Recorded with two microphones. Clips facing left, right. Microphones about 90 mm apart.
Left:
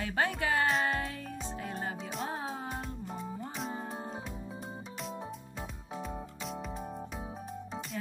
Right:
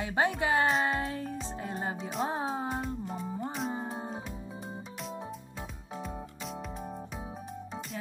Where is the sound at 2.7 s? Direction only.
Centre (ahead or behind).